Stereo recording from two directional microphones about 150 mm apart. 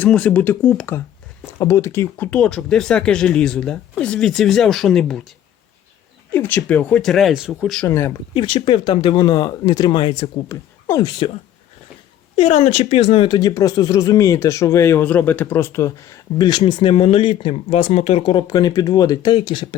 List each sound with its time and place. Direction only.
0.0 s speech: 10° left (ahead or behind)
1.5 s speech: 20° left (ahead or behind); by 5.2 s 5° left (ahead or behind)
6.3 s speech: 10° left (ahead or behind); by 7.8 s 5° right (ahead or behind)
7.9 s speech: 15° left (ahead or behind)
8.3 s speech: 35° left (ahead or behind)
12.4 s speech: 45° left (ahead or behind)